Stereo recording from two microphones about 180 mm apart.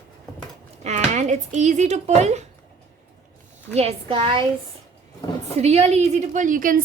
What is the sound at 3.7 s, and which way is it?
Speech, 35° right (ahead or behind).